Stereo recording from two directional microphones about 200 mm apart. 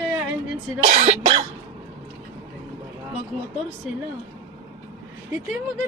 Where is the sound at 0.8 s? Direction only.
35° right (ahead or behind).